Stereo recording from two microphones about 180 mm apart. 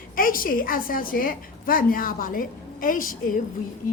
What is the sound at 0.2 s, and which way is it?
A woman's voice, 50° left (ahead or behind).